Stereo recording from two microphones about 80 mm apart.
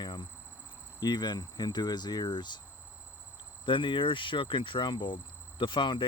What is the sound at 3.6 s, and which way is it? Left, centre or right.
Speech, left.